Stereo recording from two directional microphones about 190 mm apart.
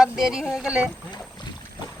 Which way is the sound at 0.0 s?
5° right (ahead or behind).